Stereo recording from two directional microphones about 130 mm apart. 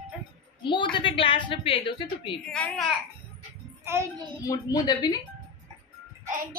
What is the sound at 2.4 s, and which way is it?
Speech, 5° left (ahead or behind).